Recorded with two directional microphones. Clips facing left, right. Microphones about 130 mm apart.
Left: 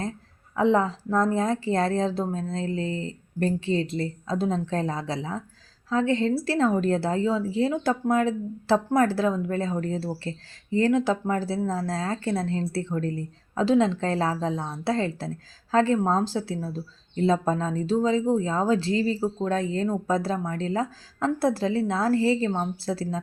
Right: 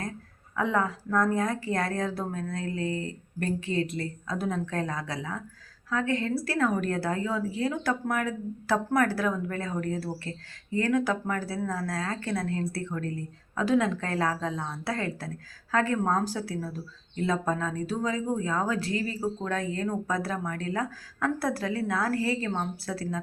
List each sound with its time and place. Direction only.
0.5 s speech: 25° left (ahead or behind)